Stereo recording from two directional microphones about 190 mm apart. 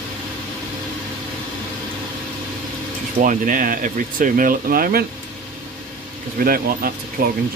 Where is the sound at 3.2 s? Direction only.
45° right (ahead or behind).